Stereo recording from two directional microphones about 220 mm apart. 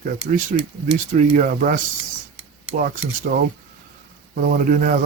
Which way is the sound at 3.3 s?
40° right (ahead or behind).